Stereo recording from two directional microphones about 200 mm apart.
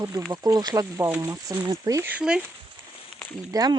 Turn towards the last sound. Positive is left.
turn(degrees=-20)  # may be behind; listen again after turning